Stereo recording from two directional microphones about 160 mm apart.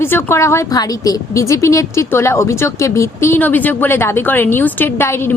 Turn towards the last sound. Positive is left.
turn(degrees=15)  # may be behind; listen again after turning